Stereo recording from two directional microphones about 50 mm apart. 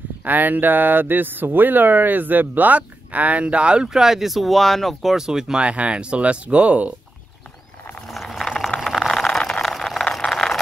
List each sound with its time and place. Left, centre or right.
0.2 s speech: right
3.9 s speech: centre
5.1 s speech: centre; by 6.9 s right
8.1 s a sound: centre
8.5 s vehicle: centre
9.2 s vehicle: centre